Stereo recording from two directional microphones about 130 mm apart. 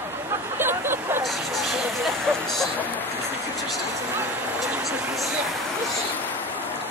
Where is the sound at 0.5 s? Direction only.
15° right (ahead or behind).